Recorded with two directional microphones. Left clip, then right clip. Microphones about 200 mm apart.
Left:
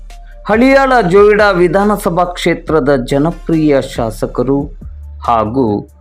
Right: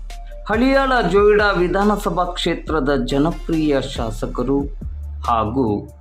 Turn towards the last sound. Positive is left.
turn(degrees=25)  # may be behind; listen again after turning